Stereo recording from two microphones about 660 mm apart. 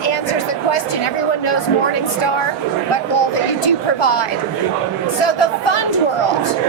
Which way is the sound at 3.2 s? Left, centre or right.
Left.